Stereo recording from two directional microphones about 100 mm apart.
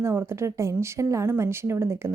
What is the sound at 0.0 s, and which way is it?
A woman's voice, 25° right (ahead or behind).